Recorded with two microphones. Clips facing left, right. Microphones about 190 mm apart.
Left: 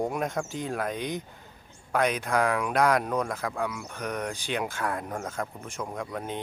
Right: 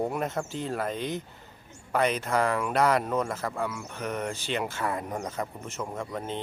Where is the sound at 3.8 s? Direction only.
15° left (ahead or behind).